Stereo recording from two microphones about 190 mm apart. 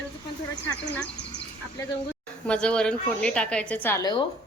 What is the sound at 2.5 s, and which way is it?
A woman's voice, 5° left (ahead or behind).